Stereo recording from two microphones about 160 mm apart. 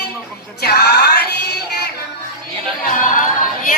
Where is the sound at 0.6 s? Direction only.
85° left.